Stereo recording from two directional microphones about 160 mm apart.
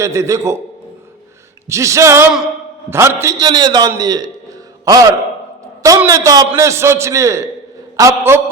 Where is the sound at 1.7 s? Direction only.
20° right (ahead or behind).